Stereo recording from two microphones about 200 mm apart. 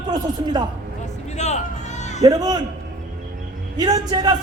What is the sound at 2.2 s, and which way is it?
Speech, 20° right (ahead or behind).